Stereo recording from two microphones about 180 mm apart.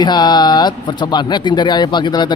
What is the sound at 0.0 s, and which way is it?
Speech, 25° left (ahead or behind).